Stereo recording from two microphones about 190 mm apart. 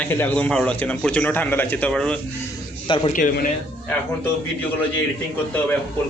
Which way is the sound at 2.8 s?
30° left (ahead or behind).